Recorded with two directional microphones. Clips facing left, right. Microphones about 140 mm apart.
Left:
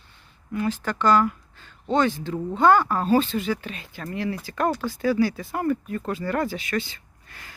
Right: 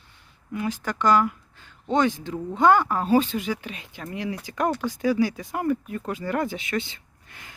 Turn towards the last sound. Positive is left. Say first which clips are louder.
# left 1 dB
turn(degrees=-20)  # may be behind; listen again after turning